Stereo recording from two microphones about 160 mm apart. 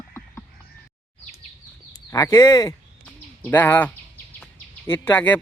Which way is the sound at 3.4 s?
10° left (ahead or behind).